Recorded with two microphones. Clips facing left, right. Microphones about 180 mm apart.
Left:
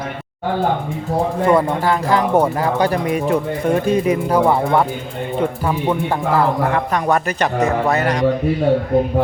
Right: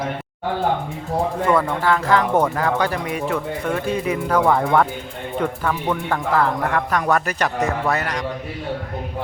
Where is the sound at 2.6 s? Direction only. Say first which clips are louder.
Left 4 dB; 35° left (ahead or behind).